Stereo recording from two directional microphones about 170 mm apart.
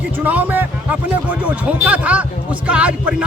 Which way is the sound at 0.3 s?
10° right (ahead or behind).